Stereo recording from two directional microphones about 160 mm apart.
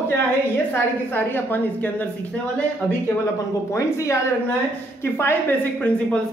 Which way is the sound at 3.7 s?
20° left (ahead or behind).